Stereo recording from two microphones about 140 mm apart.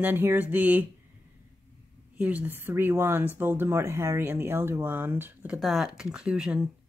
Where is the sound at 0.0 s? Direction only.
15° right (ahead or behind).